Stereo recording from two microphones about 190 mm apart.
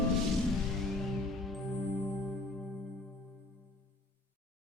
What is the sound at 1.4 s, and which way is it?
Music, centre (ahead or behind).